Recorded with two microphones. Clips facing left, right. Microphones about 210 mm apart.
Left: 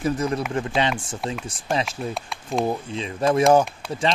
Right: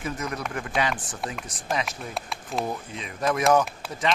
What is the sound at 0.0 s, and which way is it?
Speech, 30° left (ahead or behind).